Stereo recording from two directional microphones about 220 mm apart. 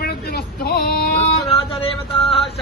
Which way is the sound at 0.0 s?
45° left (ahead or behind).